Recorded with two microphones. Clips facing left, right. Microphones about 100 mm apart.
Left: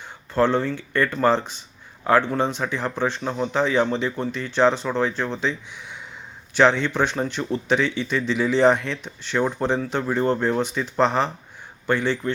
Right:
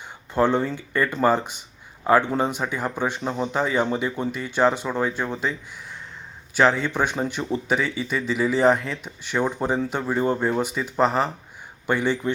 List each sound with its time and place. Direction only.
0.3 s a man's voice: 15° right (ahead or behind)